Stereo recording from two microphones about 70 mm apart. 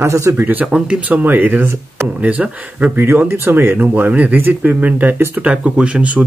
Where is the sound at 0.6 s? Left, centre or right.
Centre.